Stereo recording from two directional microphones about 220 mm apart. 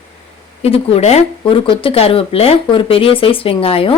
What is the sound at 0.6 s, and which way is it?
A woman's voice, 25° left (ahead or behind).